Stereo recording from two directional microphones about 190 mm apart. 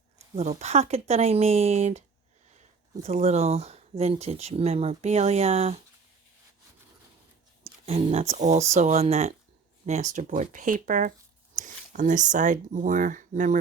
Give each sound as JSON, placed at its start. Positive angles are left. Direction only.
{"t": 0.6, "sound": "speech", "side_deg": -35}
{"t": 7.9, "sound": "speech", "side_deg": -30}